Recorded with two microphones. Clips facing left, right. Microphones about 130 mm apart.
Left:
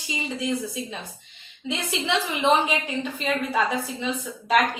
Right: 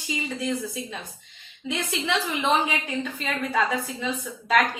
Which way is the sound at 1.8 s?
15° left (ahead or behind).